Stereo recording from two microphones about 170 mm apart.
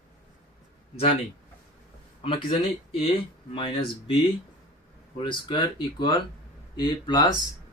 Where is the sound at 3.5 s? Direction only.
30° left (ahead or behind).